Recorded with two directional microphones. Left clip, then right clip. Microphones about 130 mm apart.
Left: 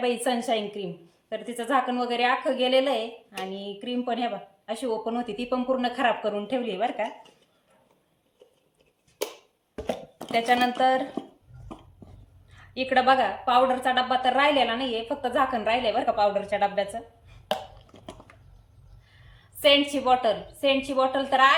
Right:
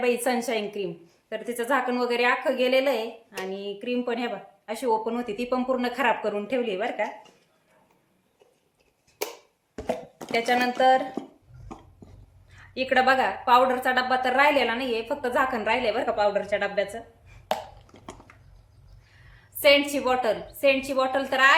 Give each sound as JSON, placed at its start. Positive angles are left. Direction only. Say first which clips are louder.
{"t": 0.0, "sound": "a woman's voice", "louder": "right 2 dB", "side_deg": -25}
{"t": 9.7, "sound": "a sound", "louder": "right 1 dB", "side_deg": 40}
{"t": 10.3, "sound": "speech", "louder": "left 1 dB", "side_deg": -10}
{"t": 12.5, "sound": "a woman's voice", "louder": "right 2 dB", "side_deg": -15}
{"t": 17.5, "sound": "a sound", "louder": "right 1 dB", "side_deg": 40}
{"t": 19.6, "sound": "a woman's voice", "louder": "right 1 dB", "side_deg": -25}